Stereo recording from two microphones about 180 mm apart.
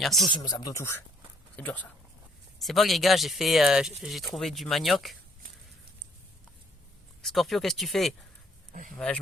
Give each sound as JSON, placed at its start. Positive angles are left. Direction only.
{"t": 0.0, "sound": "speech", "side_deg": 0}
{"t": 0.3, "sound": "speech", "side_deg": 25}
{"t": 7.2, "sound": "speech", "side_deg": 0}
{"t": 8.7, "sound": "speech", "side_deg": -50}